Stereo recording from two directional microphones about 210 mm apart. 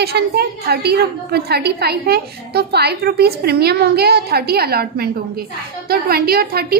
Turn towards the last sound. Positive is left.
turn(degrees=-45)  # may be behind; listen again after turning